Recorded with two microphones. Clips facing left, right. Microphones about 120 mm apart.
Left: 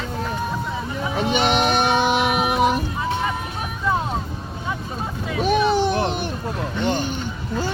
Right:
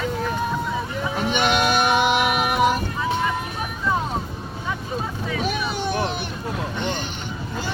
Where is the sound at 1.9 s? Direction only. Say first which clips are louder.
Even; 5° right (ahead or behind).